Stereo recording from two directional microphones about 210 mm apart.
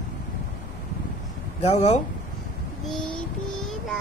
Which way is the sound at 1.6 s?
30° left (ahead or behind).